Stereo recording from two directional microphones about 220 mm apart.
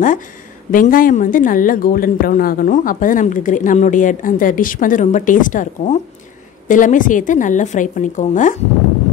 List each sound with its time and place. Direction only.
0.7 s a woman's voice: 40° left (ahead or behind)